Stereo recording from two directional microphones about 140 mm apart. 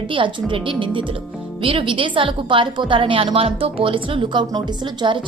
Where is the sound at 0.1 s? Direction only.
35° right (ahead or behind).